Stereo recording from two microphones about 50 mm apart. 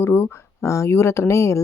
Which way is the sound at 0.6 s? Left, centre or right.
Left.